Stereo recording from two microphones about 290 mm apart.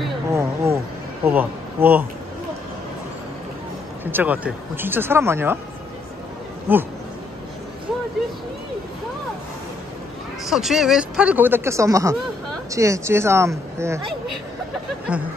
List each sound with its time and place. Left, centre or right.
0.0 s a sound: centre
1.2 s speech: centre
4.0 s speech: centre
6.7 s speech: centre
10.4 s speech: centre